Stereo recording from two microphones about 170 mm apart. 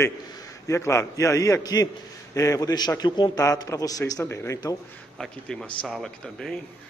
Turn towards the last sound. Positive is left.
turn(degrees=5)  # may be behind; listen again after turning